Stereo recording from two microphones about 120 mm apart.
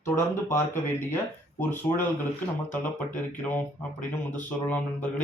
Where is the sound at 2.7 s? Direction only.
15° left (ahead or behind).